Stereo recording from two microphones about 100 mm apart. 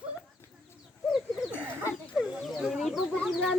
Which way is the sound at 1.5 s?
15° right (ahead or behind).